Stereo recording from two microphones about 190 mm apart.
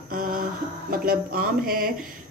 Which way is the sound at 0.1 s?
45° right (ahead or behind).